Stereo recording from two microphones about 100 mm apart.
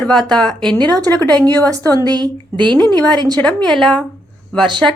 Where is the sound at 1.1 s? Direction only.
25° left (ahead or behind).